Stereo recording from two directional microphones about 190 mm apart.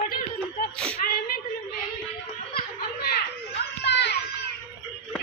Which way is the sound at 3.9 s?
65° left (ahead or behind).